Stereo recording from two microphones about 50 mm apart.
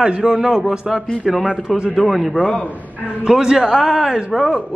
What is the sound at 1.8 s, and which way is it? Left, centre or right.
Speech, centre.